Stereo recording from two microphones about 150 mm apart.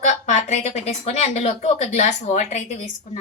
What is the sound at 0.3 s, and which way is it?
A woman's voice, 50° left (ahead or behind).